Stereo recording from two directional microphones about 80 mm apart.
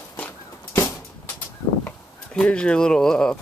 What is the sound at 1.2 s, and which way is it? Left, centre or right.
Bird, left.